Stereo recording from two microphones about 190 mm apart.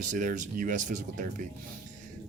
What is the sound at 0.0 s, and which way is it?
Speech, 40° right (ahead or behind).